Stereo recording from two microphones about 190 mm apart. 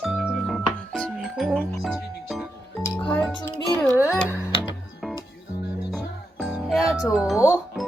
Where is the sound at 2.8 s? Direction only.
15° left (ahead or behind).